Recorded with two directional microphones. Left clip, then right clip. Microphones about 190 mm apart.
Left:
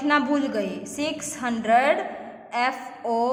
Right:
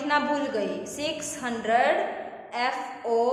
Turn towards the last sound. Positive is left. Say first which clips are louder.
# left 1 dB
turn(degrees=35)  # may be behind; listen again after turning